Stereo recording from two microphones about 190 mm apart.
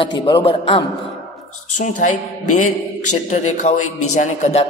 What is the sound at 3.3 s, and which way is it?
A man's voice, 40° left (ahead or behind).